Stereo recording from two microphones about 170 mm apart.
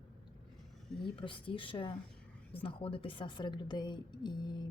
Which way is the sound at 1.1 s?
30° left (ahead or behind).